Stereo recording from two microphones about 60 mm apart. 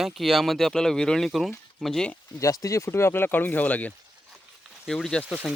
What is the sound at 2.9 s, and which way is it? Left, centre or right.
Speech, left.